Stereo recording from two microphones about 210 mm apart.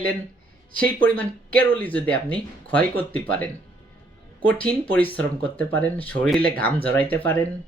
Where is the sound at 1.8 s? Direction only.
5° left (ahead or behind).